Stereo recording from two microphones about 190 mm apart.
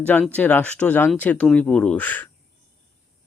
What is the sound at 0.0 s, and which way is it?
Speech, 10° left (ahead or behind).